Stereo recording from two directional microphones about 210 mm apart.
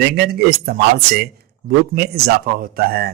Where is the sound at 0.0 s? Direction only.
45° right (ahead or behind).